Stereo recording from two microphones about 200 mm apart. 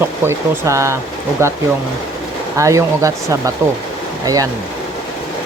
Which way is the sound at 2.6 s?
15° right (ahead or behind).